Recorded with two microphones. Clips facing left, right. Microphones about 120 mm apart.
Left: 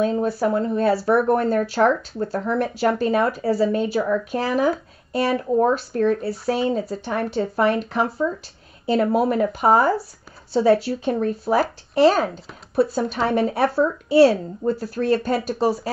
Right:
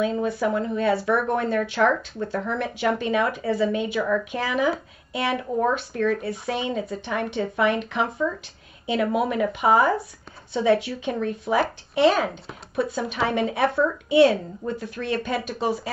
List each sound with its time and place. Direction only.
0.0 s speech: 40° left (ahead or behind)